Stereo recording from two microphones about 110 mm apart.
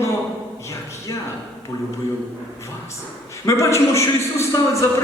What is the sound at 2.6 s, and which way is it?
A man's voice, 25° left (ahead or behind).